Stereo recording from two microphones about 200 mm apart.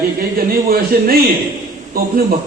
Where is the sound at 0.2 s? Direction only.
50° right (ahead or behind).